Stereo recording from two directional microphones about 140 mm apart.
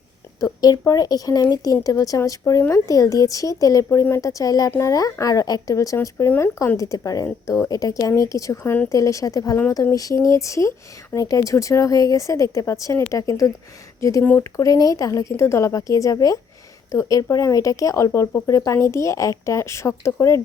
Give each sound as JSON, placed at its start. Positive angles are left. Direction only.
{"t": 0.3, "sound": "speech", "side_deg": 25}